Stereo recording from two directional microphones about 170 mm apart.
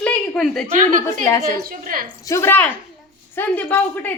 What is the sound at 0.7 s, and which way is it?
A woman's voice, 50° right (ahead or behind).